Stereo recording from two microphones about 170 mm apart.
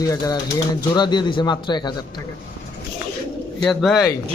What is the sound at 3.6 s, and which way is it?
Speech, centre (ahead or behind).